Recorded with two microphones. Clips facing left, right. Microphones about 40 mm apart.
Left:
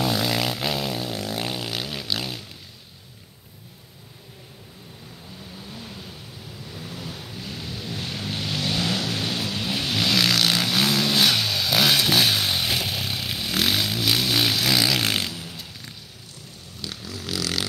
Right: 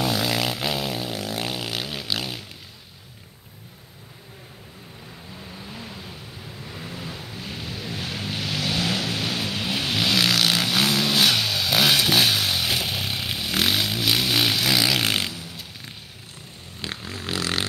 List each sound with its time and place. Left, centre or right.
0.0 s vehicle: centre
5.7 s vehicle: right
7.3 s vehicle: centre
16.8 s a sound: right